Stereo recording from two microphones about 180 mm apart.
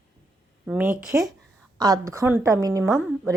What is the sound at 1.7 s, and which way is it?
Speech, 20° right (ahead or behind).